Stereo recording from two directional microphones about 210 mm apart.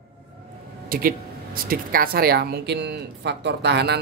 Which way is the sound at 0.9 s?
45° right (ahead or behind).